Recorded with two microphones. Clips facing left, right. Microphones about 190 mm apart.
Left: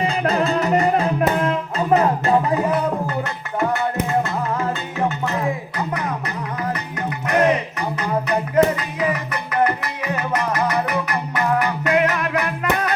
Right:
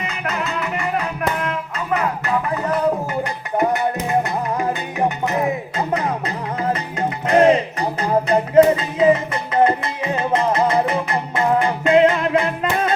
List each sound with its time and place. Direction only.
0.0 s music: 35° left (ahead or behind)
2.6 s a sound: 10° left (ahead or behind)
3.6 s music: 20° right (ahead or behind)